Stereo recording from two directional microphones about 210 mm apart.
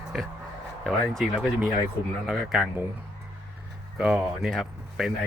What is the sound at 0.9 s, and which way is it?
Speech, centre (ahead or behind).